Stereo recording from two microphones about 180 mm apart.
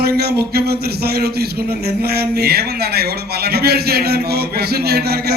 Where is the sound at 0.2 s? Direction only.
60° right (ahead or behind).